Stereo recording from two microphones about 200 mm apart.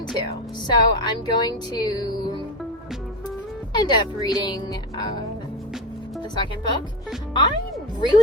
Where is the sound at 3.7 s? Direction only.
20° left (ahead or behind).